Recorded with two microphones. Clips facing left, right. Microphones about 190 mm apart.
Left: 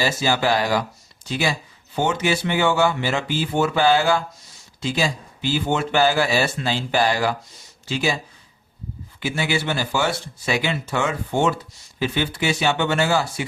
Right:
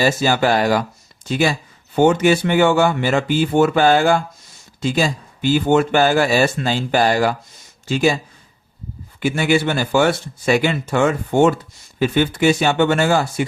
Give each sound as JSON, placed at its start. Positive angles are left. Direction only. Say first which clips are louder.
{"t": 0.0, "sound": "speech", "louder": "right 5 dB", "side_deg": -50}
{"t": 9.2, "sound": "speech", "louder": "right 7 dB", "side_deg": -50}